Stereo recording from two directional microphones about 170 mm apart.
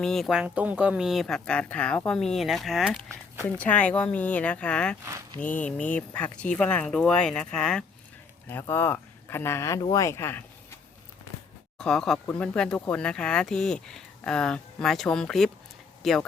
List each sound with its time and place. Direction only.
0.0 s speech: centre (ahead or behind)
11.8 s speech: 5° left (ahead or behind)